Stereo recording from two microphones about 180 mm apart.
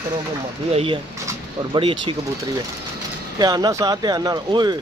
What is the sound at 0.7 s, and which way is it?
Speech, 30° right (ahead or behind).